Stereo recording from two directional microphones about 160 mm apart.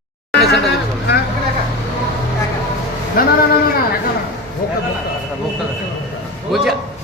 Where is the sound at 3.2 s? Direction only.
65° left (ahead or behind).